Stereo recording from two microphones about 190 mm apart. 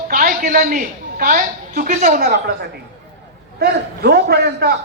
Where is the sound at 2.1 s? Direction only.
60° right (ahead or behind).